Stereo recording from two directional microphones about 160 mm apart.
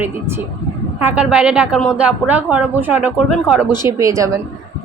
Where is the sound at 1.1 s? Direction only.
5° right (ahead or behind).